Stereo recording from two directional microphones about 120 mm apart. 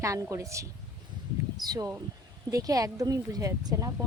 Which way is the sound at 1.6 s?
30° right (ahead or behind).